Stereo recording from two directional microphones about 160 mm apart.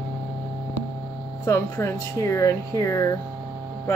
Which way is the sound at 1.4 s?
15° left (ahead or behind).